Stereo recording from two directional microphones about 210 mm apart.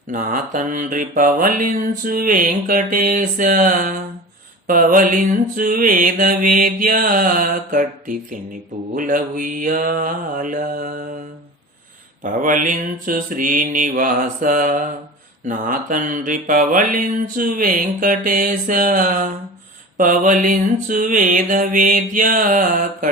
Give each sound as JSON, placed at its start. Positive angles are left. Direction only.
{"t": 0.1, "sound": "mantra", "side_deg": -40}
{"t": 12.2, "sound": "mantra", "side_deg": -40}